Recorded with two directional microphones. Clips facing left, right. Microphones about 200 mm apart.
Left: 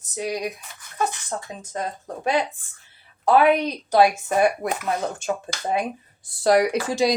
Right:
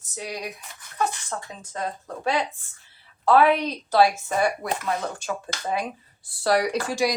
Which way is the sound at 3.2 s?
15° left (ahead or behind).